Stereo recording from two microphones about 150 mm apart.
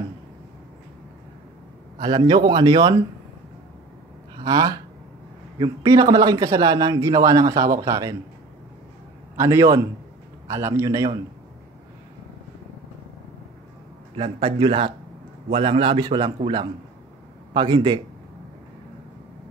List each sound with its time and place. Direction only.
2.0 s a man's voice: 30° right (ahead or behind)
4.4 s a man's voice: 25° right (ahead or behind)
9.4 s a man's voice: 20° right (ahead or behind)
14.1 s a man's voice: 35° right (ahead or behind)
17.6 s a man's voice: 30° right (ahead or behind)